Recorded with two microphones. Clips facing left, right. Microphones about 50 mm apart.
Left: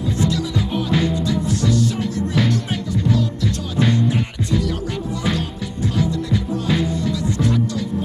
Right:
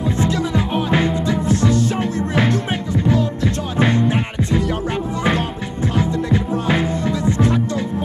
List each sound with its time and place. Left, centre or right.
0.0 s music: right